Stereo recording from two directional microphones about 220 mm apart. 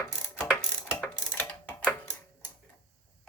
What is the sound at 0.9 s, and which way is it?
Mechanisms, 10° left (ahead or behind).